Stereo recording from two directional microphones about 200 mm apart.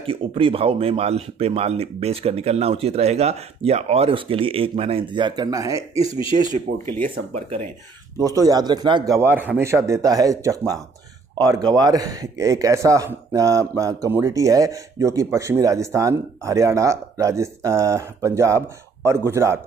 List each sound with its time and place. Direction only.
0.0 s speech: 25° right (ahead or behind)
5.9 s speech: 25° left (ahead or behind)
7.3 s speech: 35° right (ahead or behind)
8.2 s speech: 20° right (ahead or behind)
9.2 s speech: 10° right (ahead or behind)